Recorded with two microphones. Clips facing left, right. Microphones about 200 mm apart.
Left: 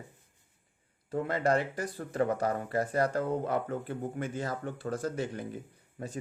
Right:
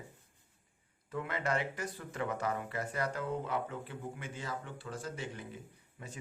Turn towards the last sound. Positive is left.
turn(degrees=40)  # may be behind; listen again after turning